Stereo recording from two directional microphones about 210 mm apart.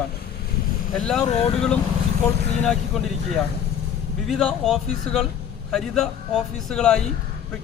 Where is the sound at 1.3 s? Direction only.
30° left (ahead or behind).